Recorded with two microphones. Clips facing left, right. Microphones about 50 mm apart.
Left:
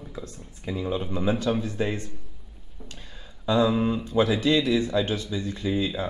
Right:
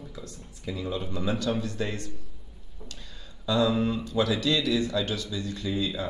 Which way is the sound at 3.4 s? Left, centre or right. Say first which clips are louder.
Left 2 dB; left.